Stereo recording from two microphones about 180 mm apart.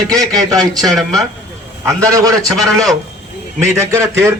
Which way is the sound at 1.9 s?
20° right (ahead or behind).